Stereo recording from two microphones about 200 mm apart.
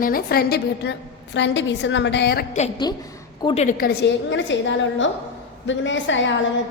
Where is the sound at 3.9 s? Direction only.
65° left (ahead or behind).